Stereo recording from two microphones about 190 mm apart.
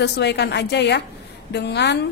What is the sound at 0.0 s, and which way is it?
A woman's voice, 65° left (ahead or behind).